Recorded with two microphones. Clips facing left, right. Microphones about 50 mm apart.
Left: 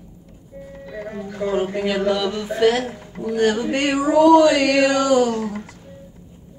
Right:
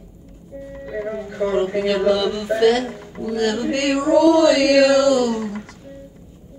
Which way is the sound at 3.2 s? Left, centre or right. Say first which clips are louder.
Left 2 dB; centre.